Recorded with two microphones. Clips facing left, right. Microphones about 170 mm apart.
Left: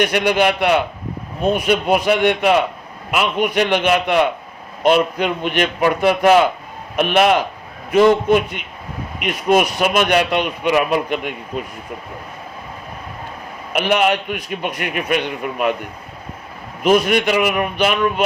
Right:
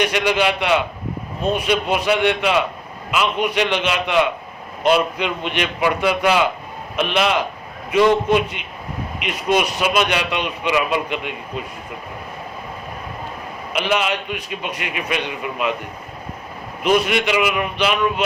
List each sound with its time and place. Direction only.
0.0 s a man's voice: 50° left (ahead or behind)
13.7 s a man's voice: 50° left (ahead or behind)
16.8 s a man's voice: 45° left (ahead or behind)